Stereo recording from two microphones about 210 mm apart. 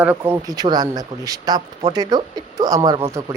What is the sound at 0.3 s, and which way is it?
Speech, 20° right (ahead or behind).